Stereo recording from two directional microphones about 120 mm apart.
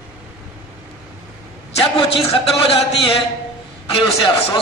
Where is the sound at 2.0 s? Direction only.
50° left (ahead or behind).